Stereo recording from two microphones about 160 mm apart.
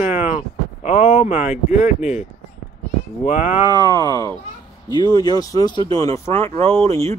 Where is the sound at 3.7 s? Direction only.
25° left (ahead or behind).